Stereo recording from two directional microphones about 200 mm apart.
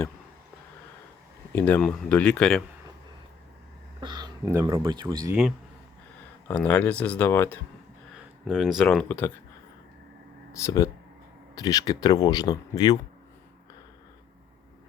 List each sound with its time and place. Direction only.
1.5 s speech: 10° left (ahead or behind)
4.0 s speech: 20° right (ahead or behind)
6.5 s speech: 10° left (ahead or behind)
8.1 s speech: centre (ahead or behind)
10.6 s speech: 15° left (ahead or behind)